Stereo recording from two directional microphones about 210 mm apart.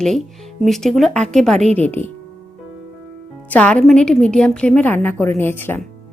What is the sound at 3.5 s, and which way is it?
Speech, 5° left (ahead or behind).